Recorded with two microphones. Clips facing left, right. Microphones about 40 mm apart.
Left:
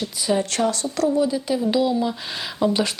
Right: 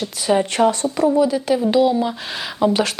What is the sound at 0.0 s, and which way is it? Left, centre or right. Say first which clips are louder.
Speech: right 4 dB; right.